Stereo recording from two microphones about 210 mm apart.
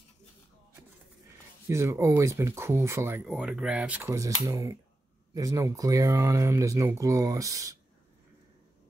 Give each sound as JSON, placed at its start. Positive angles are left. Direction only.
{"t": 1.7, "sound": "speech", "side_deg": -15}